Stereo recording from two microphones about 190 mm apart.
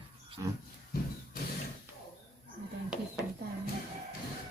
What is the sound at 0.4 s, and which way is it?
Speech, 20° right (ahead or behind).